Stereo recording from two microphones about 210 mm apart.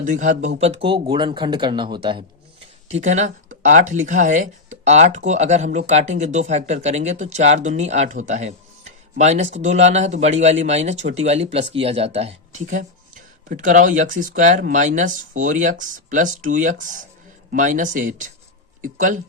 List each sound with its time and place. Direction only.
0.0 s speech: 35° right (ahead or behind)
3.0 s speech: 35° right (ahead or behind)